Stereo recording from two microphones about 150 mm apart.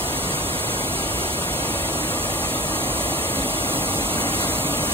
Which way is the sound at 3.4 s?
15° right (ahead or behind).